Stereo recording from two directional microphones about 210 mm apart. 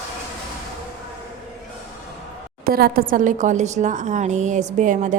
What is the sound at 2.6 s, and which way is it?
A woman's voice, 45° right (ahead or behind).